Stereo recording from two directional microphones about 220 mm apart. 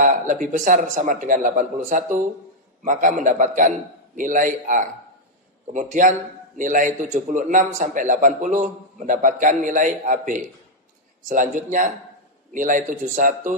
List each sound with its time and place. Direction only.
0.0 s a man's voice: 35° right (ahead or behind)